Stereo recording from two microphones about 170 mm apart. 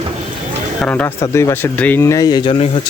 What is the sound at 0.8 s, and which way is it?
Speech, 10° left (ahead or behind).